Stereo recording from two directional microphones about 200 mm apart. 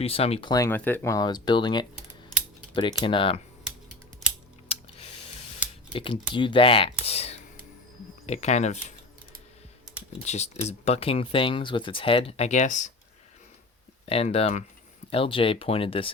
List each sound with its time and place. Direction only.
0.0 s speech: 30° left (ahead or behind)
0.5 s speech: 15° left (ahead or behind)
3.0 s speech: 25° left (ahead or behind)
4.7 s a sound: 30° left (ahead or behind)
5.9 s speech: 25° left (ahead or behind)
10.1 s speech: 35° left (ahead or behind)
14.0 s speech: 30° left (ahead or behind)